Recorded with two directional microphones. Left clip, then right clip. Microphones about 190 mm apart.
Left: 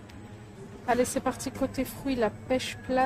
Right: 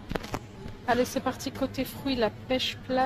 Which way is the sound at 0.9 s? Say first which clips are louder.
Even; 10° left (ahead or behind).